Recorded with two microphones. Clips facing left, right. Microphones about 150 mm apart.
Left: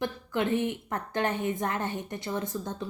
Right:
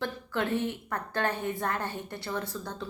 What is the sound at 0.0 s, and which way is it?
A woman's voice, 15° left (ahead or behind).